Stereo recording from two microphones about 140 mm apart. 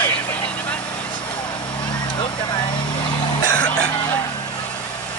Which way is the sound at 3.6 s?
10° left (ahead or behind).